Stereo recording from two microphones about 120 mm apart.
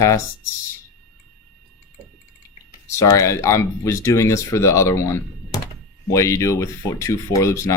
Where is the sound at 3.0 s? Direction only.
25° left (ahead or behind).